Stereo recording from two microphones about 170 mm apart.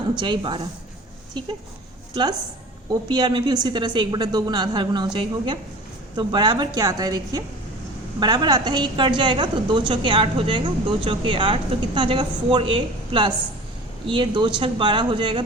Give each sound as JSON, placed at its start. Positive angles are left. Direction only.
{"t": 0.2, "sound": "a woman's voice", "side_deg": -30}
{"t": 2.9, "sound": "a woman's voice", "side_deg": -25}